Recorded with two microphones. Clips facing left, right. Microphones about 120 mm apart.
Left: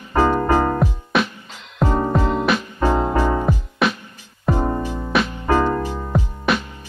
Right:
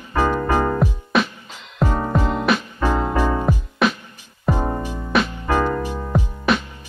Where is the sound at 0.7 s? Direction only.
Centre (ahead or behind).